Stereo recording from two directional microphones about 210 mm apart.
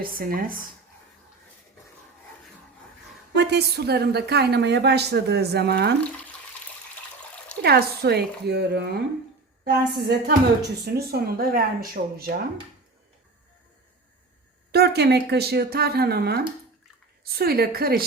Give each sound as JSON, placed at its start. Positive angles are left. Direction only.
{"t": 0.0, "sound": "a woman's voice", "side_deg": -45}
{"t": 3.3, "sound": "a woman's voice", "side_deg": -50}
{"t": 7.6, "sound": "a woman's voice", "side_deg": -50}
{"t": 14.7, "sound": "a woman's voice", "side_deg": -50}